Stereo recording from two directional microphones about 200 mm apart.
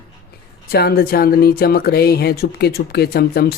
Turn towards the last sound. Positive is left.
turn(degrees=50)  # may be behind; listen again after turning